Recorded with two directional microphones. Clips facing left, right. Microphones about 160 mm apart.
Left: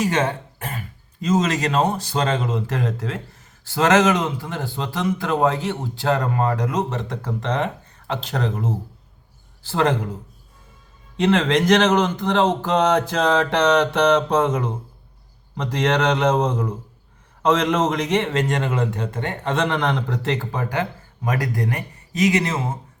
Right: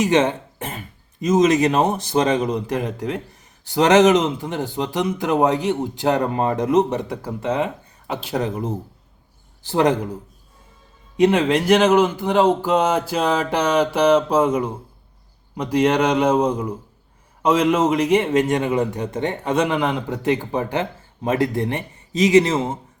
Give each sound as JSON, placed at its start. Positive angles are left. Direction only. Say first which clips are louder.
{"t": 0.0, "sound": "speech", "louder": "right 4 dB", "side_deg": -20}
{"t": 7.1, "sound": "speech", "louder": "right 2 dB", "side_deg": -10}
{"t": 11.2, "sound": "a man's voice", "louder": "right 2 dB", "side_deg": -15}